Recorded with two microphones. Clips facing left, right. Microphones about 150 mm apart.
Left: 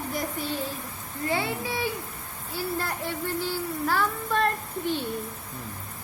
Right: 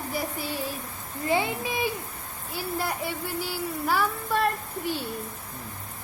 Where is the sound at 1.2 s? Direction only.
15° right (ahead or behind).